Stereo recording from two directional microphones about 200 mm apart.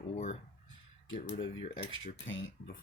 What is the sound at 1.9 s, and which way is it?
Speech, 70° left (ahead or behind).